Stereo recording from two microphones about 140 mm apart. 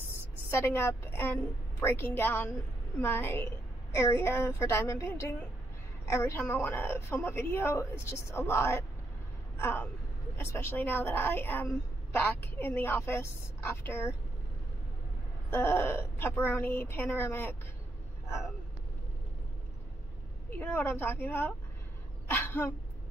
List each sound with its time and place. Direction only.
0.5 s a woman's voice: 20° left (ahead or behind)
15.5 s a woman's voice: 15° left (ahead or behind)
20.4 s a woman's voice: 15° left (ahead or behind)